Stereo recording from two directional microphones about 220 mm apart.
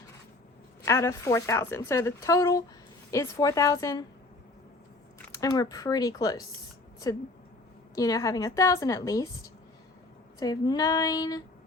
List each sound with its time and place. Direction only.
0.9 s a woman's voice: 15° left (ahead or behind)
5.3 s a woman's voice: 15° left (ahead or behind)
7.9 s a woman's voice: 15° left (ahead or behind)
10.4 s a woman's voice: 15° left (ahead or behind)